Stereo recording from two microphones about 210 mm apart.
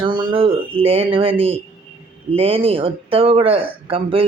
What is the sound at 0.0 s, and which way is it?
Speech, 20° right (ahead or behind).